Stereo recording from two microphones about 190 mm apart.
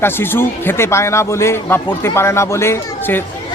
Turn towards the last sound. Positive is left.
turn(degrees=10)  # may be behind; listen again after turning